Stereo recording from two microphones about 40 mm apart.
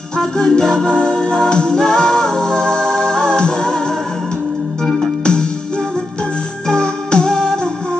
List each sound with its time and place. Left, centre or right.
0.2 s music: centre
6.7 s music: left